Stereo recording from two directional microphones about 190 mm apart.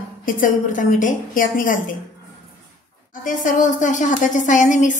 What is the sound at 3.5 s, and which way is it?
Speech, 40° left (ahead or behind).